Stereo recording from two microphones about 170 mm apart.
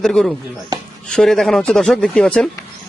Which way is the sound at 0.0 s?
5° left (ahead or behind).